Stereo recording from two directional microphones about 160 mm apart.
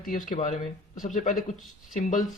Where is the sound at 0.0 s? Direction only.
60° left (ahead or behind).